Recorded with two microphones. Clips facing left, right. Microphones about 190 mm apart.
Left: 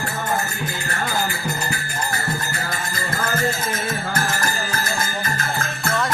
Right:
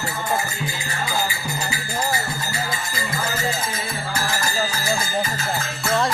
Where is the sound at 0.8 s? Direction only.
60° left (ahead or behind).